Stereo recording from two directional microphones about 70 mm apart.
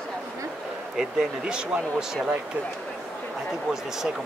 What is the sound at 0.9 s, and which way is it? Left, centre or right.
Speech, centre.